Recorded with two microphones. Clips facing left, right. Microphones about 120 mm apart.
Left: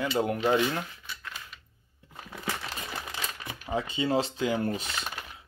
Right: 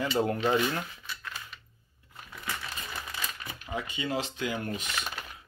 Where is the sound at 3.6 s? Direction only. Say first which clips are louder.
Left 5 dB; 30° left (ahead or behind).